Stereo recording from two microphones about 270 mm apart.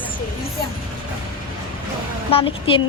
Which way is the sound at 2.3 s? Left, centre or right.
Centre.